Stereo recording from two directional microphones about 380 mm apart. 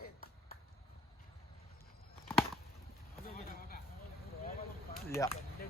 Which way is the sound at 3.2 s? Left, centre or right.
Left.